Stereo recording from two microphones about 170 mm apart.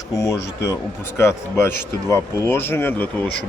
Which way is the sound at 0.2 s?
20° left (ahead or behind).